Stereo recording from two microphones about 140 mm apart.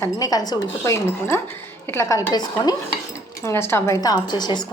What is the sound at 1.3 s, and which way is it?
A woman's voice, 15° left (ahead or behind).